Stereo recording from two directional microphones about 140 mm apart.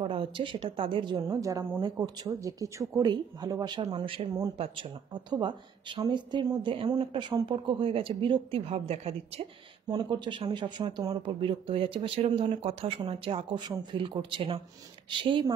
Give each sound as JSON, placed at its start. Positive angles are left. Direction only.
{"t": 0.0, "sound": "a woman's voice", "side_deg": -40}
{"t": 1.3, "sound": "a woman's voice", "side_deg": -25}
{"t": 9.8, "sound": "a woman's voice", "side_deg": -30}